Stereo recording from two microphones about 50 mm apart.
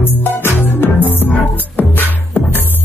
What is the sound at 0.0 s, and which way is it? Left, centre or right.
Music, left.